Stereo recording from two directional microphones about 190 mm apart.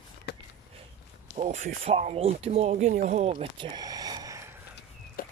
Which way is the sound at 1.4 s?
35° right (ahead or behind).